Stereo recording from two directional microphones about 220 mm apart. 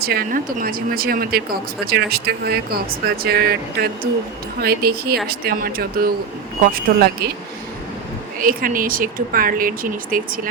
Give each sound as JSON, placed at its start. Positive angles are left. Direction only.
{"t": 0.0, "sound": "speech", "side_deg": -45}
{"t": 8.4, "sound": "speech", "side_deg": -40}